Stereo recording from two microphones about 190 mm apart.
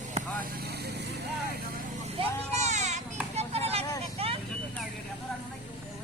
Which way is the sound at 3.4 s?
30° right (ahead or behind).